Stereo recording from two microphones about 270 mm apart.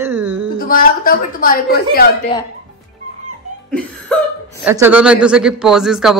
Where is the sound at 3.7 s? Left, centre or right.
Centre.